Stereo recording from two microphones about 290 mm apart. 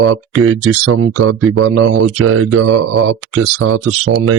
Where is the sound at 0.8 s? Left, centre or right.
Right.